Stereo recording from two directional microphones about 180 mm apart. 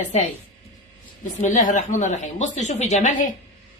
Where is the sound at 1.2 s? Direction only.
45° left (ahead or behind).